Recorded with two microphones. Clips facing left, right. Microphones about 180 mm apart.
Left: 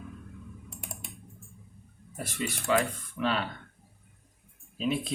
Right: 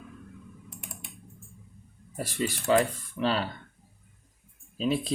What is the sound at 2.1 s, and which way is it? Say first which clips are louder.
Speech: right 4 dB; 35° right (ahead or behind).